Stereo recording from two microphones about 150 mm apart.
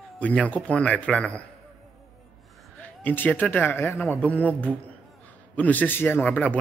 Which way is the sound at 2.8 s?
10° left (ahead or behind).